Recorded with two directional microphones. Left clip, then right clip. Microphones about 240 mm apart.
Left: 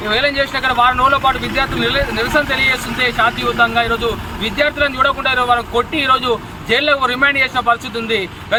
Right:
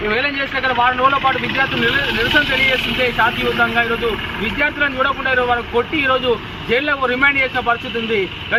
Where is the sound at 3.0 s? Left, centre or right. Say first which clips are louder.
Left 4 dB; left.